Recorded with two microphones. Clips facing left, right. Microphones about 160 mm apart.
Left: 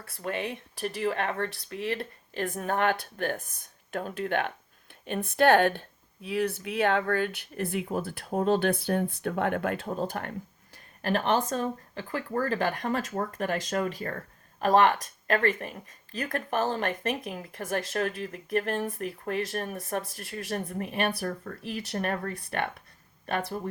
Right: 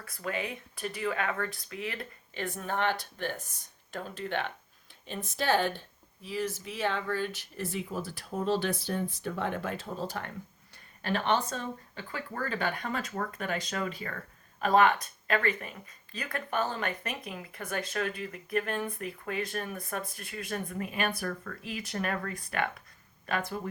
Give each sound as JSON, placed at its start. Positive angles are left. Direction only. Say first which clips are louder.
{"t": 0.2, "sound": "speech", "louder": "left 3 dB", "side_deg": 30}
{"t": 2.0, "sound": "speech", "louder": "left 5 dB", "side_deg": 45}